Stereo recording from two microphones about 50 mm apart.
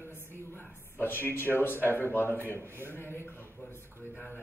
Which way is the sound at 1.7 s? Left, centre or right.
Right.